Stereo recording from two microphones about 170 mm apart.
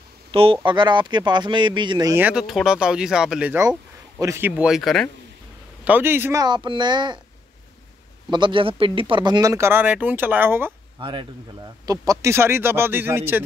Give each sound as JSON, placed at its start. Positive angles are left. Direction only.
{"t": 0.3, "sound": "speech", "side_deg": -30}
{"t": 2.1, "sound": "speech", "side_deg": -5}
{"t": 5.9, "sound": "speech", "side_deg": -10}
{"t": 6.4, "sound": "speech", "side_deg": -25}
{"t": 8.3, "sound": "speech", "side_deg": -30}
{"t": 11.0, "sound": "speech", "side_deg": -30}